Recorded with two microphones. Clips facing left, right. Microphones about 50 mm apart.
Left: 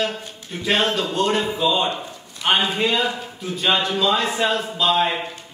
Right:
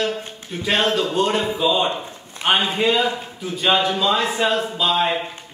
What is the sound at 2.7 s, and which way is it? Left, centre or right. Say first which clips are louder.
A man's voice: right 2 dB; centre.